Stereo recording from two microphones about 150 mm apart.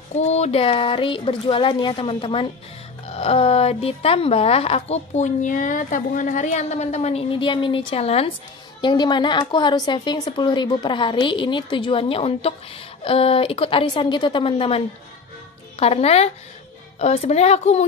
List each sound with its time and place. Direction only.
0.1 s a woman's voice: 50° left (ahead or behind)
8.8 s a woman's voice: 30° left (ahead or behind); by 17.8 s 45° left (ahead or behind)